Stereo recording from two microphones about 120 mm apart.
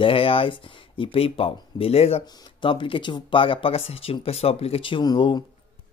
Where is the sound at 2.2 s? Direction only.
35° left (ahead or behind).